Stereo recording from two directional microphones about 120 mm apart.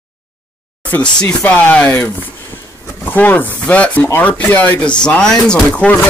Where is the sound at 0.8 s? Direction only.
15° left (ahead or behind).